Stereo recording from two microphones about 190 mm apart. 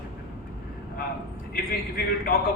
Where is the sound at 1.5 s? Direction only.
50° left (ahead or behind).